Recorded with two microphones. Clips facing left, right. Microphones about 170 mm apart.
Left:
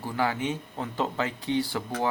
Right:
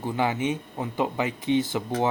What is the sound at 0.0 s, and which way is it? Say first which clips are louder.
Speech: right 3 dB; 20° right (ahead or behind).